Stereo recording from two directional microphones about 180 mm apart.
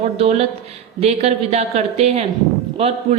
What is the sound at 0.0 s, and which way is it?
A woman's voice, 35° right (ahead or behind).